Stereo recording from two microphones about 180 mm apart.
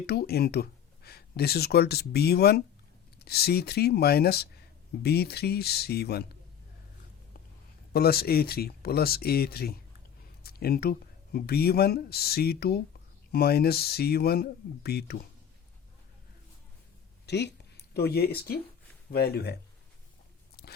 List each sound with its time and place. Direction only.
0.0 s speech: 60° left (ahead or behind)
7.9 s speech: 60° left (ahead or behind)
17.2 s speech: 70° left (ahead or behind)
20.6 s biting: 60° left (ahead or behind)